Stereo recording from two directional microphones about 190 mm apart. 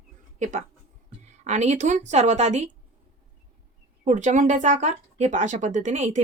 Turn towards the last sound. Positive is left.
turn(degrees=-40)  # may be behind; listen again after turning